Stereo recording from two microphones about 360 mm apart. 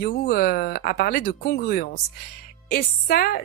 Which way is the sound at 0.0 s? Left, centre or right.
Left.